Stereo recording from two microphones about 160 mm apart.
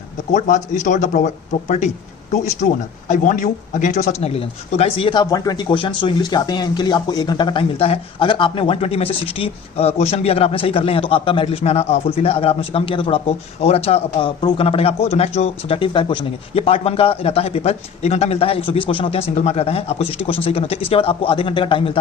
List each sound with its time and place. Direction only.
0.3 s speech: 50° left (ahead or behind)
3.1 s speech: 55° left (ahead or behind)
4.2 s speech: 40° left (ahead or behind)
5.2 s speech: 25° left (ahead or behind)